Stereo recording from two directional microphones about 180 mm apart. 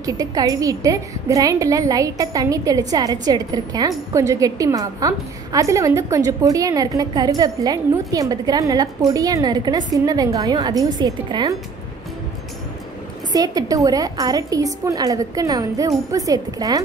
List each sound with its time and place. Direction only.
0.0 s a woman's voice: 20° right (ahead or behind)
13.3 s a woman's voice: 20° right (ahead or behind)